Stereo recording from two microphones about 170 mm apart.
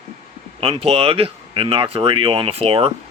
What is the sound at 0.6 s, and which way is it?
Speech, 35° right (ahead or behind).